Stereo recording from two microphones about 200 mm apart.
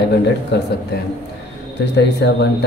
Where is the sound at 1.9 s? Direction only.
60° left (ahead or behind).